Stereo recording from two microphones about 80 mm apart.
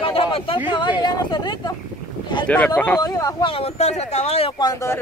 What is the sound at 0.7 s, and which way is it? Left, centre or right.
Speech, left.